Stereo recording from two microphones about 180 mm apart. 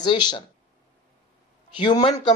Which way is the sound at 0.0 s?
25° left (ahead or behind).